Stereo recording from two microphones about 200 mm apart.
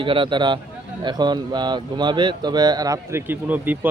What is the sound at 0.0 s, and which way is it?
A man's voice, 25° right (ahead or behind).